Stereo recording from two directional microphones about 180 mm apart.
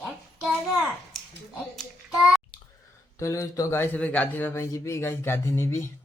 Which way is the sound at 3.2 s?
15° left (ahead or behind).